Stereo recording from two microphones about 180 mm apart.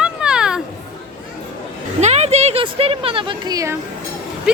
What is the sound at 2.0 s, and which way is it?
Speech, 35° right (ahead or behind).